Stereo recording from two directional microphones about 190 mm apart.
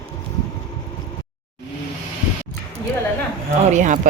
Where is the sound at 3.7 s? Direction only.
40° right (ahead or behind).